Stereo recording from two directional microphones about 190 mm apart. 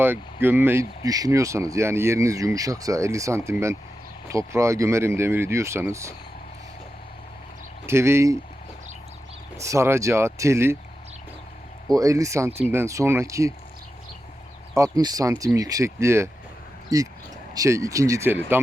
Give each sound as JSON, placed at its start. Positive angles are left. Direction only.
{"t": 0.0, "sound": "speech", "side_deg": -10}
{"t": 7.9, "sound": "speech", "side_deg": -15}
{"t": 9.6, "sound": "speech", "side_deg": -15}
{"t": 11.9, "sound": "speech", "side_deg": -15}
{"t": 14.8, "sound": "speech", "side_deg": -20}